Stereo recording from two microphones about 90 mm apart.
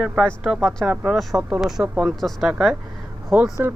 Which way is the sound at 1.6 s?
5° right (ahead or behind).